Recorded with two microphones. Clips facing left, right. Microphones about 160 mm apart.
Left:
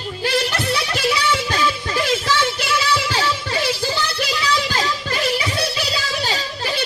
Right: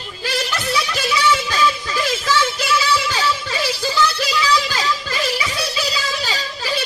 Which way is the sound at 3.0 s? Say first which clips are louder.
Even; 55° left (ahead or behind).